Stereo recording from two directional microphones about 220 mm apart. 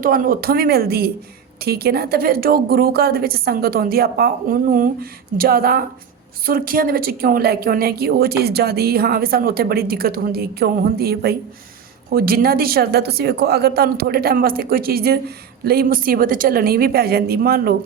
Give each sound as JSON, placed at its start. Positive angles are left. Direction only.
{"t": 0.0, "sound": "a woman's voice", "side_deg": -40}